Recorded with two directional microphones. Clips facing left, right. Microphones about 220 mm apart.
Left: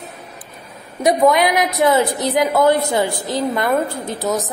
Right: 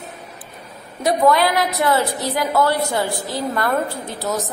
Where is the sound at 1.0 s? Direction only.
20° left (ahead or behind).